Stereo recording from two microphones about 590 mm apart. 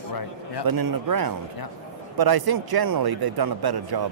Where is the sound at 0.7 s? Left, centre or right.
Right.